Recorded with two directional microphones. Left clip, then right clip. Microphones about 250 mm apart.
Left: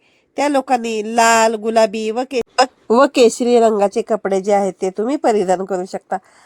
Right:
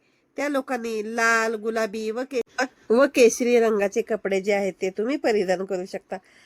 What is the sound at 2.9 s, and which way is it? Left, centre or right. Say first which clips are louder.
Speech: left 4 dB; centre.